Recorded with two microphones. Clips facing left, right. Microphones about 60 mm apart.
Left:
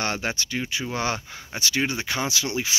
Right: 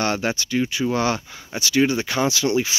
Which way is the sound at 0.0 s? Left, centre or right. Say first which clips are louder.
Right 5 dB; centre.